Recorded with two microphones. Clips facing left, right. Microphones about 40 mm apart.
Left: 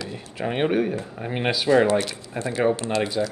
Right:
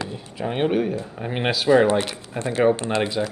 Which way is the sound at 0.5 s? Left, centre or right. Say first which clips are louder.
Right 1 dB; centre.